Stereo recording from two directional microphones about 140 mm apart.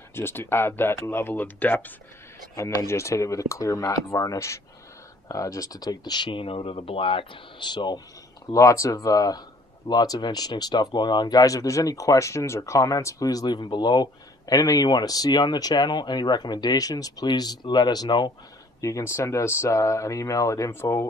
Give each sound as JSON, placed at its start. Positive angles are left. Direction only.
{"t": 0.1, "sound": "speech", "side_deg": 15}